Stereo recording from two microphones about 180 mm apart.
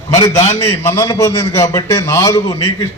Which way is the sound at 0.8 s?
15° left (ahead or behind).